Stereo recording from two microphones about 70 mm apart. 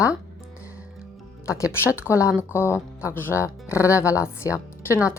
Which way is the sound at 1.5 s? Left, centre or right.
Left.